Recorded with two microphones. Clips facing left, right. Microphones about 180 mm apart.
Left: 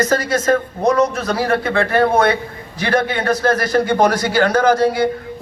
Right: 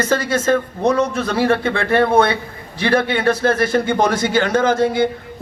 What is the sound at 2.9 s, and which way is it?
Speech, 30° right (ahead or behind).